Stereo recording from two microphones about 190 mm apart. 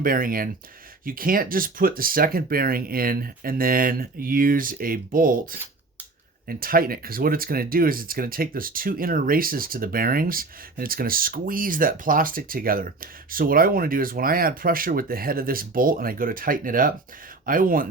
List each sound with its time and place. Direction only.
0.0 s speech: 50° right (ahead or behind)